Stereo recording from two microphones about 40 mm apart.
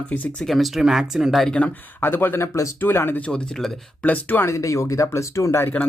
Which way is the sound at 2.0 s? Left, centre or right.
Left.